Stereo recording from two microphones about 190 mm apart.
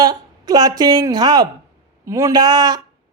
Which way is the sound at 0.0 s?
20° right (ahead or behind).